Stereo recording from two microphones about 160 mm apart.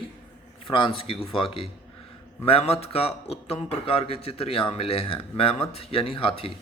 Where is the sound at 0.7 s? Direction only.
35° left (ahead or behind).